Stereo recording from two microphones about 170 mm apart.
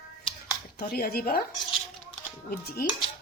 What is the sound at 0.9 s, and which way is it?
Speech, 65° left (ahead or behind).